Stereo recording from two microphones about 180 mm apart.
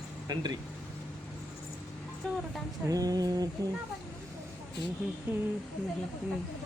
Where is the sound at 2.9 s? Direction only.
20° right (ahead or behind).